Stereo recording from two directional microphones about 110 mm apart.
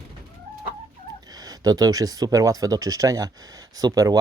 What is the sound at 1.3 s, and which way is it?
Speech, 35° right (ahead or behind).